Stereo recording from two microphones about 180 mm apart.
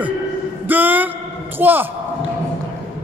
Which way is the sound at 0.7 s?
10° right (ahead or behind).